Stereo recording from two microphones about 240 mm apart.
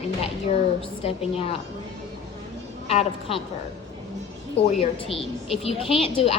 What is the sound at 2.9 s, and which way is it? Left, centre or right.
Speech, left.